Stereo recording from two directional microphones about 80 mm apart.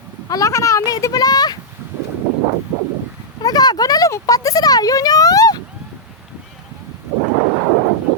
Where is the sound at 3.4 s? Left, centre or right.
Left.